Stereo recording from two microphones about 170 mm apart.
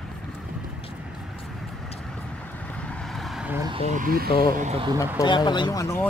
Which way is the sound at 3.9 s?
55° right (ahead or behind).